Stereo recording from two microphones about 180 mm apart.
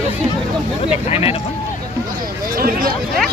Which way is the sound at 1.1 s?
30° left (ahead or behind).